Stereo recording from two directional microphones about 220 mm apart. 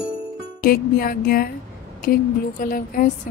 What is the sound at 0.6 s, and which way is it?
A woman's voice, 40° left (ahead or behind).